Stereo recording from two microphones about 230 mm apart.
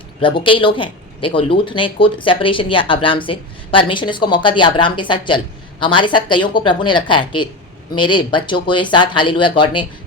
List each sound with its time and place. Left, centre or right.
0.2 s speech: left